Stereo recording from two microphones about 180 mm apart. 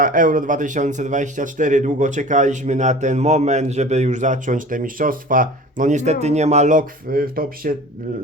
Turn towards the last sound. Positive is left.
turn(degrees=-50)  # may be behind; listen again after turning